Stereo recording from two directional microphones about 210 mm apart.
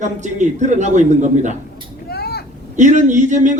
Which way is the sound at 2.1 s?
50° left (ahead or behind).